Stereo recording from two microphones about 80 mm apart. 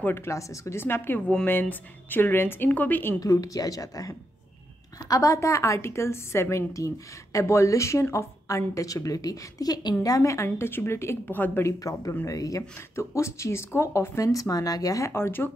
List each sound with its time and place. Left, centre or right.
0.0 s a woman's voice: left
3.2 s speech: left
10.0 s speech: left
11.6 s speech: left